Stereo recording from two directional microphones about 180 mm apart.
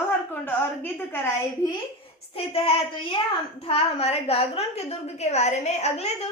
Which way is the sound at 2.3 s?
30° left (ahead or behind).